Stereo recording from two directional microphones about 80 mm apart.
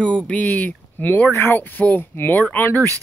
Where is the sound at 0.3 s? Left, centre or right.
Centre.